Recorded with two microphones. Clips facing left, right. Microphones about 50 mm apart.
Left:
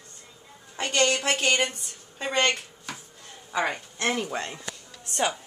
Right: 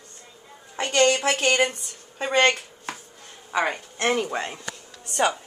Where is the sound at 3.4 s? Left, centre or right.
Right.